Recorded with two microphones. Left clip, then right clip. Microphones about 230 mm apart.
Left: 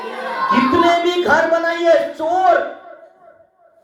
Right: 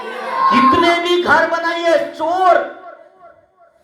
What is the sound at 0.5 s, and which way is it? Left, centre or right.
Speech, right.